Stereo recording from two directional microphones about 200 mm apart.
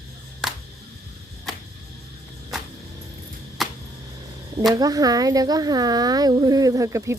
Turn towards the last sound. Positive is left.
turn(degrees=-15)  # may be behind; listen again after turning